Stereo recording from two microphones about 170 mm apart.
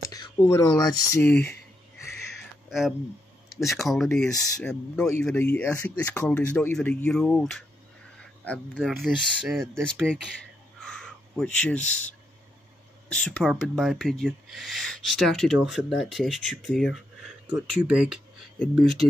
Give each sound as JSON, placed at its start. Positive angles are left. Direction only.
{"t": 0.1, "sound": "a sound", "side_deg": 25}
{"t": 0.5, "sound": "speech", "side_deg": 20}
{"t": 3.4, "sound": "speech", "side_deg": 0}
{"t": 8.7, "sound": "speech", "side_deg": 0}
{"t": 10.8, "sound": "a sound", "side_deg": 5}
{"t": 13.1, "sound": "speech", "side_deg": 5}